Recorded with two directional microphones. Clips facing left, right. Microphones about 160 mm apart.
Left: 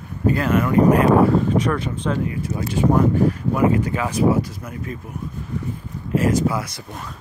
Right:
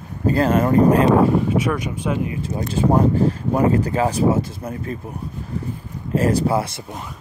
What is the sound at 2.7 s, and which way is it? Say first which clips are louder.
Speech: even; 30° right (ahead or behind).